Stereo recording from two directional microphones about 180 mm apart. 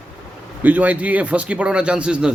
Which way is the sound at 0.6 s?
10° right (ahead or behind).